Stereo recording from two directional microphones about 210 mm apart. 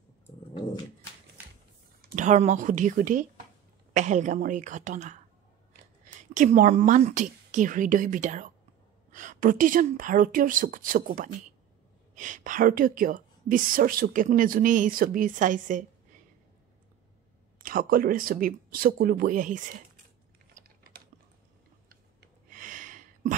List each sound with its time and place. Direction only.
2.0 s speech: 40° right (ahead or behind)
6.3 s speech: 40° right (ahead or behind)
17.6 s speech: 40° right (ahead or behind)
21.8 s a sound: 40° right (ahead or behind)